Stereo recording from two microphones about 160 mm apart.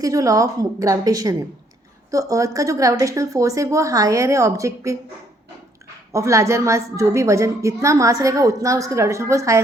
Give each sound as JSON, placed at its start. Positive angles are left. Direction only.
{"t": 0.0, "sound": "a woman's voice", "side_deg": -20}
{"t": 6.1, "sound": "a woman's voice", "side_deg": -20}